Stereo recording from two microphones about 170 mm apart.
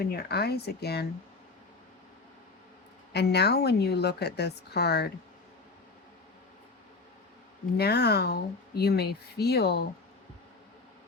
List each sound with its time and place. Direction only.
0.0 s a woman's voice: 65° left (ahead or behind)
3.1 s a woman's voice: 75° left (ahead or behind)
7.8 s a woman's voice: 70° left (ahead or behind)